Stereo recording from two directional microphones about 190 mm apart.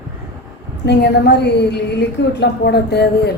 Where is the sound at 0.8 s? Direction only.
60° left (ahead or behind).